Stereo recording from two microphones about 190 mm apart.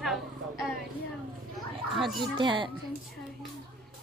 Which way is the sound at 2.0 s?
Centre (ahead or behind).